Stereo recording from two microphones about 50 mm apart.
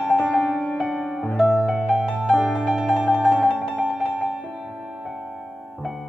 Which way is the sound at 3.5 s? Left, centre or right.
Right.